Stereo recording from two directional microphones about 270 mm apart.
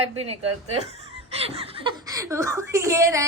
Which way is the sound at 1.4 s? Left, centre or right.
Right.